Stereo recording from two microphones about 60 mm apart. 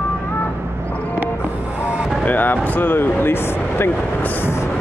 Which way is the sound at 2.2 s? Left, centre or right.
Left.